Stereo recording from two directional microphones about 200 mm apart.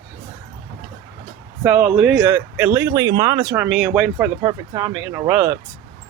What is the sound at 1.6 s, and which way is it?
Speech, 10° right (ahead or behind).